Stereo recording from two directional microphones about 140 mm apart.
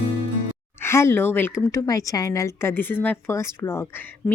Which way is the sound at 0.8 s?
20° left (ahead or behind).